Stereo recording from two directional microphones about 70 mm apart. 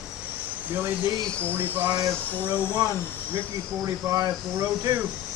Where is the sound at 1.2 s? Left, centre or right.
Centre.